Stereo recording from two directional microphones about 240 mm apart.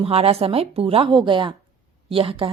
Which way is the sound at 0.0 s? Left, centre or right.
Right.